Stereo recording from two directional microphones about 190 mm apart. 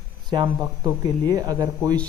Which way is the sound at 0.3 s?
20° right (ahead or behind).